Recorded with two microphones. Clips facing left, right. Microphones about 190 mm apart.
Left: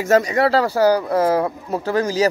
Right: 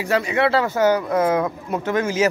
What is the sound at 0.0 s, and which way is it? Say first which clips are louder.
Speech: left 4 dB; 40° left (ahead or behind).